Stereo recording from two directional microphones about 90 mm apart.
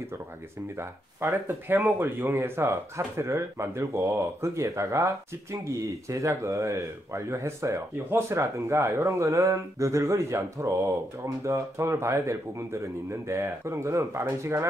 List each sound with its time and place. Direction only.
0.7 s speech: 30° right (ahead or behind)